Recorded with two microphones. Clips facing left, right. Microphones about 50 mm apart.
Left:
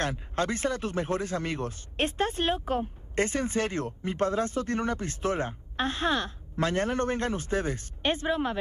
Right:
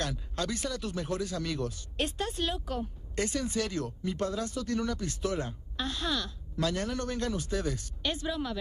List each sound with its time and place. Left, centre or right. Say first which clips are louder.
0.0 s speech: left 5 dB; left